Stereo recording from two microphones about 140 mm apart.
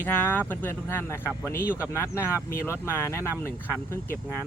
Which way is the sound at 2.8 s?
15° left (ahead or behind).